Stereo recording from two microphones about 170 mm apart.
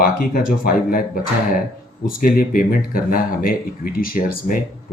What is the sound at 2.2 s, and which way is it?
Speech, 55° left (ahead or behind).